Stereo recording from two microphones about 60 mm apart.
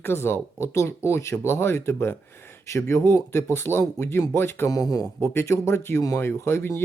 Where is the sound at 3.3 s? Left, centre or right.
Left.